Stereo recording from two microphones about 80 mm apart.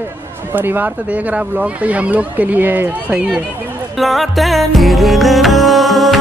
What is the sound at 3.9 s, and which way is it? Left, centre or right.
Music, centre.